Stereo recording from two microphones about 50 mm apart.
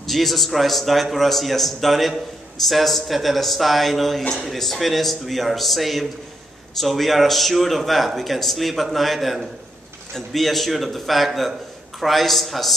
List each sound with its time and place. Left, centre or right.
0.0 s a man's voice: centre